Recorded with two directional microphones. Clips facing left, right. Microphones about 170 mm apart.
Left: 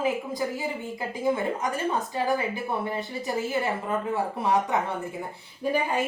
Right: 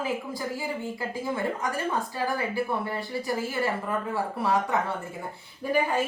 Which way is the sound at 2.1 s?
20° left (ahead or behind).